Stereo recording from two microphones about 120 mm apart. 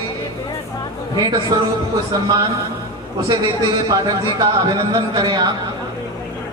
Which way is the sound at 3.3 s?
35° right (ahead or behind).